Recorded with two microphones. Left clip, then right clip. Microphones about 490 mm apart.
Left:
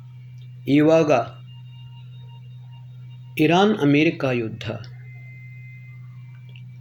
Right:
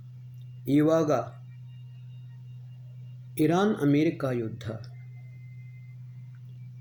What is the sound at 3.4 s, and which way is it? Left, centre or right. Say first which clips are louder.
Speech: left 7 dB; right.